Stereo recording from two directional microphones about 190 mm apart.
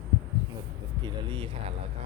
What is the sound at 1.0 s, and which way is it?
Speech, 25° right (ahead or behind).